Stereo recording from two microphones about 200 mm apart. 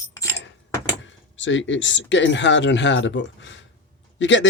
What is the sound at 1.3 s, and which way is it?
A man's voice, 70° left (ahead or behind).